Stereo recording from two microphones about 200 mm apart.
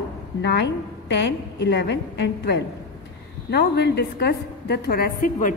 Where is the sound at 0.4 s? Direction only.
60° left (ahead or behind).